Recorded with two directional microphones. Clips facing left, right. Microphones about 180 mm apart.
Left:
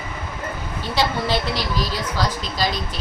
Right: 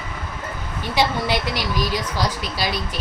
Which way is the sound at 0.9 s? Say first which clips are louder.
Right 1 dB; 15° right (ahead or behind).